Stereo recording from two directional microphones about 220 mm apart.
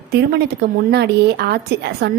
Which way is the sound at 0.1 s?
45° right (ahead or behind).